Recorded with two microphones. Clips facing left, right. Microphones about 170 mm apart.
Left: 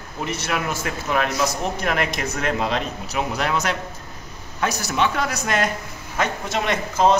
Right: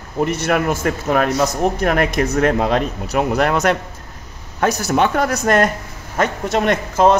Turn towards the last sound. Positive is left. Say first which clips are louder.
# right 4 dB
turn(degrees=-55)  # may be behind; listen again after turning